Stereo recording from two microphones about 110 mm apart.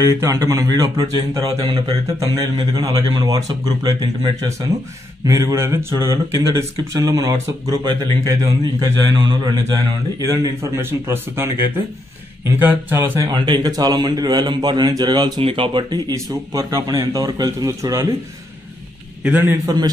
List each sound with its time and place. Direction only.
0.0 s speech: 30° right (ahead or behind)
13.3 s speech: 40° right (ahead or behind)
15.4 s speech: 55° right (ahead or behind); by 18.0 s 30° right (ahead or behind)
19.2 s a man's voice: 15° right (ahead or behind)
19.6 s speech: 35° right (ahead or behind)